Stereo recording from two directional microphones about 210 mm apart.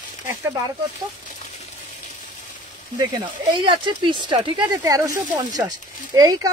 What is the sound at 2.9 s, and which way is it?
Speech, 20° right (ahead or behind).